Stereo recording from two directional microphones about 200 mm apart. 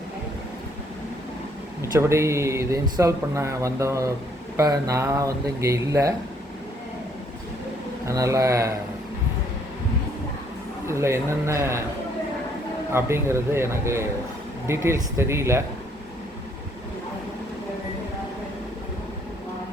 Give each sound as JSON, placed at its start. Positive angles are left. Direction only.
{"t": 1.9, "sound": "speech", "side_deg": -15}
{"t": 8.0, "sound": "speech", "side_deg": -15}
{"t": 10.8, "sound": "speech", "side_deg": -15}
{"t": 12.9, "sound": "speech", "side_deg": -10}